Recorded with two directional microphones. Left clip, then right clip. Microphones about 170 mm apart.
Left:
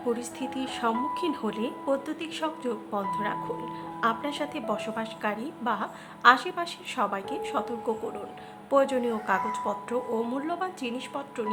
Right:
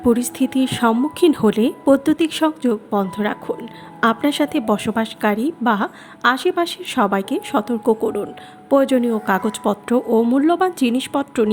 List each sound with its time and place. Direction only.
0.1 s a woman's voice: 45° right (ahead or behind)
9.5 s a woman's voice: 45° right (ahead or behind)